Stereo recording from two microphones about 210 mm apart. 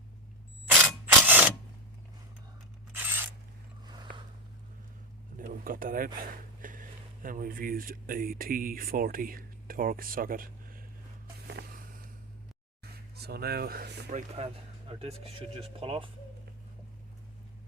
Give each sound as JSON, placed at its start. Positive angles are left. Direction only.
{"t": 0.7, "sound": "mechanisms", "side_deg": -10}
{"t": 5.4, "sound": "speech", "side_deg": -40}
{"t": 11.6, "sound": "vehicle", "side_deg": -50}
{"t": 12.8, "sound": "speech", "side_deg": -50}
{"t": 14.1, "sound": "speech", "side_deg": -35}